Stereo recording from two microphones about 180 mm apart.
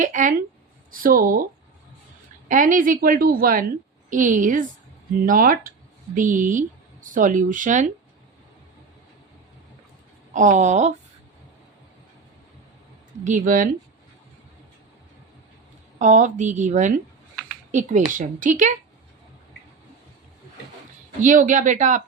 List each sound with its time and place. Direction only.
0.0 s speech: 45° right (ahead or behind)
2.5 s speech: 45° right (ahead or behind)
10.3 s speech: 45° right (ahead or behind)
13.2 s speech: 45° right (ahead or behind)
16.0 s speech: 45° right (ahead or behind)
21.2 s speech: 45° right (ahead or behind)